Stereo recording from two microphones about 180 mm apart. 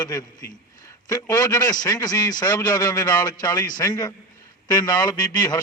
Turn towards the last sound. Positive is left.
turn(degrees=20)  # may be behind; listen again after turning